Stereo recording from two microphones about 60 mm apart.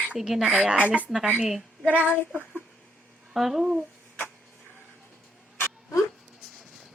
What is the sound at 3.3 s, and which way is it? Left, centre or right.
Speech, centre.